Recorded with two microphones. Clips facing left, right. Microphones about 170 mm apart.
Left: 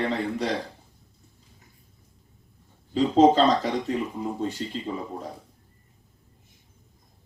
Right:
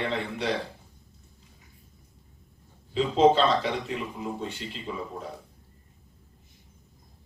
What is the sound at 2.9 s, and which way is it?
Speech, 40° left (ahead or behind).